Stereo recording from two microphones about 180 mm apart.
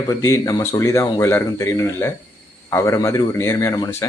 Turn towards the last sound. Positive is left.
turn(degrees=15)  # may be behind; listen again after turning